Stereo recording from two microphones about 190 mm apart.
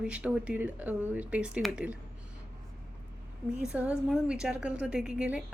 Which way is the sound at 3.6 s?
5° right (ahead or behind).